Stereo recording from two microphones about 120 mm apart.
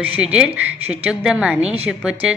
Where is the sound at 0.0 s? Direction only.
10° right (ahead or behind).